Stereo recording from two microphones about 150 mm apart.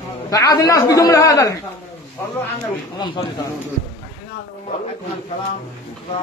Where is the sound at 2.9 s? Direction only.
30° left (ahead or behind).